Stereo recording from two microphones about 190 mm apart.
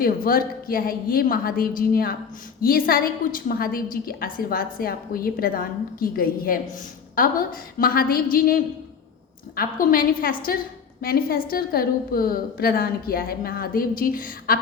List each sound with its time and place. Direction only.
0.0 s a woman's voice: 50° left (ahead or behind)